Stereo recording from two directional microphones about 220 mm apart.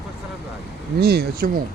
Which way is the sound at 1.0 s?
45° right (ahead or behind).